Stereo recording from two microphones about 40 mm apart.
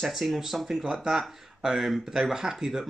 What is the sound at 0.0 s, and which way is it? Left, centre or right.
Speech, centre.